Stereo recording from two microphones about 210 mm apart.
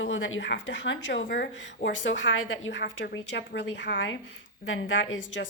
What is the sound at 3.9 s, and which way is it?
Speech, 45° left (ahead or behind).